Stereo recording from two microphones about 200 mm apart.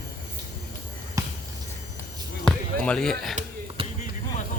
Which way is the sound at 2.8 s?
5° left (ahead or behind).